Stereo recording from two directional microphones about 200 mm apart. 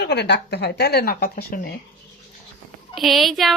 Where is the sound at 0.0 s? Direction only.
60° left (ahead or behind).